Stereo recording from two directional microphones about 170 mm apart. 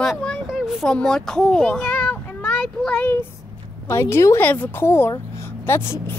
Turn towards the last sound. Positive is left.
turn(degrees=15)  # may be behind; listen again after turning